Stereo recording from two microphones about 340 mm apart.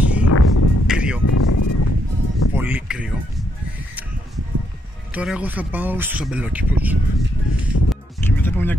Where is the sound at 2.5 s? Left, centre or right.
Centre.